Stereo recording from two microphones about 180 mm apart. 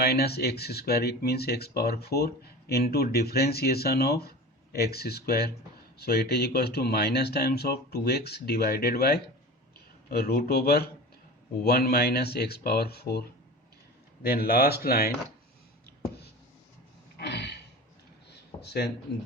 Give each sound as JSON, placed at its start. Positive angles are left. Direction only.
{"t": 0.0, "sound": "speech", "side_deg": 60}
{"t": 14.3, "sound": "speech", "side_deg": 55}
{"t": 17.2, "sound": "a sound", "side_deg": 70}
{"t": 18.6, "sound": "speech", "side_deg": 65}